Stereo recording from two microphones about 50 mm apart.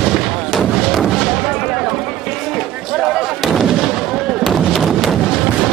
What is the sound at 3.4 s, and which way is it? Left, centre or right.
Artillery fire, centre.